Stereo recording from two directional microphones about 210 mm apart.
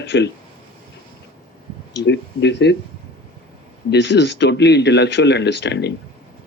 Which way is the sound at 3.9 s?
55° left (ahead or behind).